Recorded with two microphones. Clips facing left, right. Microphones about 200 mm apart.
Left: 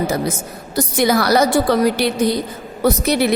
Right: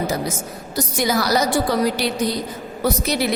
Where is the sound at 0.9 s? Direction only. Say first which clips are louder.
Left 5 dB; 60° left (ahead or behind).